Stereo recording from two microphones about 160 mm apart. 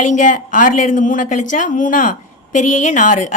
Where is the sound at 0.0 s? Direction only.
50° left (ahead or behind).